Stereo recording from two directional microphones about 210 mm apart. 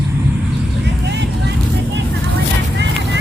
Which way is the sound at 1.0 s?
55° right (ahead or behind).